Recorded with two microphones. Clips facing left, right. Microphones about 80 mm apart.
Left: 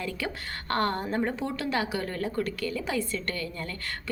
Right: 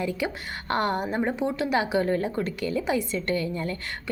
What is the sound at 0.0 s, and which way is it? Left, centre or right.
A woman's voice, centre.